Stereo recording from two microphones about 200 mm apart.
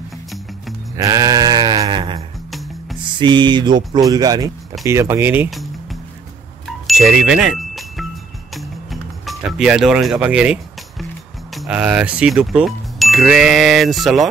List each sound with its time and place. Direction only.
0.9 s sheep: 15° right (ahead or behind)
3.2 s speech: 25° right (ahead or behind); by 5.7 s 5° right (ahead or behind)
6.9 s music: centre (ahead or behind)
11.5 s speech: 5° right (ahead or behind)